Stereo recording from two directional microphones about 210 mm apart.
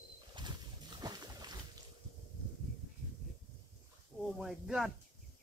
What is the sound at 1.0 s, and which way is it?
Boat, 20° right (ahead or behind).